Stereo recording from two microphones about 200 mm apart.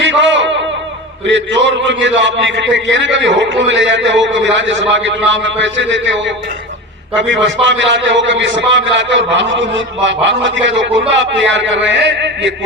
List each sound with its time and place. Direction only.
0.0 s music: 65° right (ahead or behind)
1.3 s a man's voice: 65° right (ahead or behind)